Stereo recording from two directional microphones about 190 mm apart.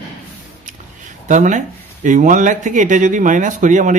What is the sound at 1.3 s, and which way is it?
Speech, 40° right (ahead or behind).